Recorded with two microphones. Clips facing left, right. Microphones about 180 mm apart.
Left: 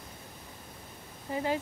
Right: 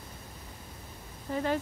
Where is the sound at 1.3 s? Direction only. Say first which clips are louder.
Right 1 dB; 15° left (ahead or behind).